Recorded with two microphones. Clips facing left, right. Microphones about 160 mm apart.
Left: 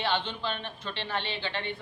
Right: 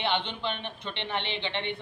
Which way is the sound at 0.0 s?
20° right (ahead or behind).